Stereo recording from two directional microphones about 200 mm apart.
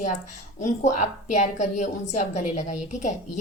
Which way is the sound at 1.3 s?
35° left (ahead or behind).